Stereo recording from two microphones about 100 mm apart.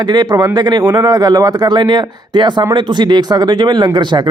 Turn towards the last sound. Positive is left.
turn(degrees=-50)  # may be behind; listen again after turning